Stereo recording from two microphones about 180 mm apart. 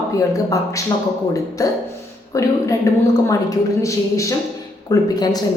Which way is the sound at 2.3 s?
15° left (ahead or behind).